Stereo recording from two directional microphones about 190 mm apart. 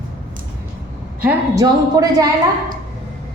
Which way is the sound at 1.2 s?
10° right (ahead or behind).